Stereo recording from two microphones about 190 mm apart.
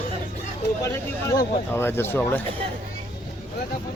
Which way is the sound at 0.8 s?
15° left (ahead or behind).